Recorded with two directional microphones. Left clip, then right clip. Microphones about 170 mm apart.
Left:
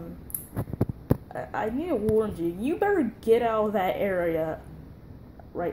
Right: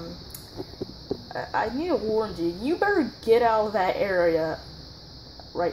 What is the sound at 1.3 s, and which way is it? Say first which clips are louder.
Speech: right 3 dB; 30° left (ahead or behind).